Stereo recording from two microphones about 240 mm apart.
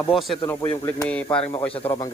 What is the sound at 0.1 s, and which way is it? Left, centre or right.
Speech, centre.